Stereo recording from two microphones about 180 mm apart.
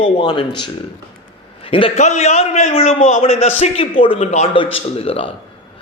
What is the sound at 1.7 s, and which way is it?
A man's voice, 35° left (ahead or behind).